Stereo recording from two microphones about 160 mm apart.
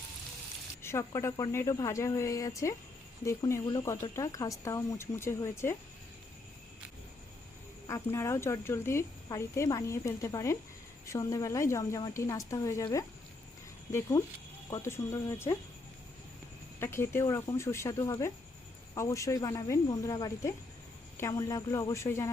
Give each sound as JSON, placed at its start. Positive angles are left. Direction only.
{"t": 0.8, "sound": "speech", "side_deg": 15}
{"t": 7.9, "sound": "speech", "side_deg": 20}
{"t": 16.8, "sound": "speech", "side_deg": 15}